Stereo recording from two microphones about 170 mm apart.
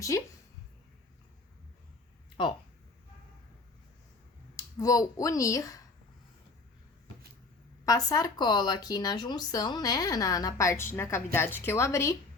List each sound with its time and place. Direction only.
0.1 s speech: 20° left (ahead or behind)
4.5 s speech: 20° left (ahead or behind)
7.9 s speech: 20° left (ahead or behind)